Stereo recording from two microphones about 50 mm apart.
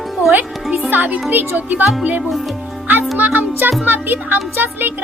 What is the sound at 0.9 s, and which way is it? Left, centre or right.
Speech, right.